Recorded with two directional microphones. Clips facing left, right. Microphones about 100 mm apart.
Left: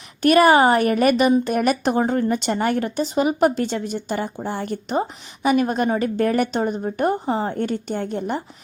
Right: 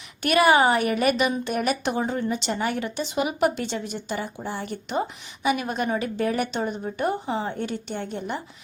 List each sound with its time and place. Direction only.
0.2 s speech: 40° left (ahead or behind)